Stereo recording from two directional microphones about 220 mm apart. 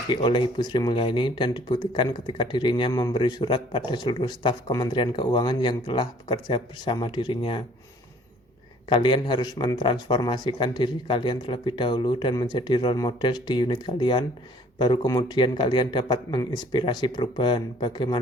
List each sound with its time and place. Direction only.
0.1 s speech: 20° left (ahead or behind)
8.9 s speech: 20° left (ahead or behind)